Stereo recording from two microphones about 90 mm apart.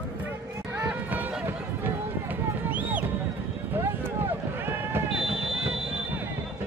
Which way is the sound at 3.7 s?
25° right (ahead or behind).